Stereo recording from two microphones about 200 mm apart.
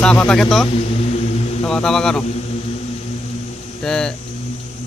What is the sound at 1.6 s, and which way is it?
Speech, 5° left (ahead or behind).